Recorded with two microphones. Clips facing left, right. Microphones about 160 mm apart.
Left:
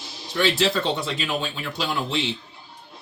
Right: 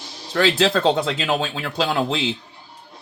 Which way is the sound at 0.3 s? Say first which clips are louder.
Right 4 dB; 90° right.